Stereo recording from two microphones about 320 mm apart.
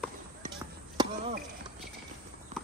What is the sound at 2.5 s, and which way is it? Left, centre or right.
Clip-clop, right.